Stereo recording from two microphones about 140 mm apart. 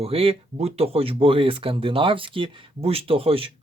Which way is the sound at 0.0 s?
45° right (ahead or behind).